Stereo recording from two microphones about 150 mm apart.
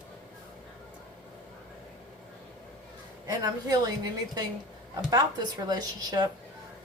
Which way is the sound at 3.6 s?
25° right (ahead or behind).